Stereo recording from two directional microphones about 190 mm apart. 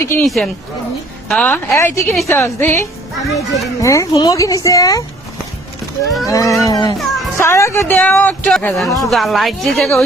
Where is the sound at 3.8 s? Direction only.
15° left (ahead or behind).